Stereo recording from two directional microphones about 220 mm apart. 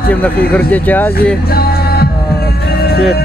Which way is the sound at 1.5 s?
45° left (ahead or behind).